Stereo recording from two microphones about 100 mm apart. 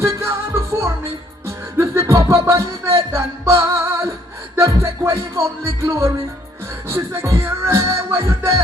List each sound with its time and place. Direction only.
0.0 s music: 25° right (ahead or behind)